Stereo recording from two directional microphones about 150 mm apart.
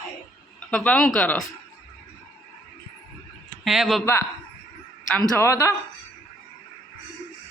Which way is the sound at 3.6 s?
Centre (ahead or behind).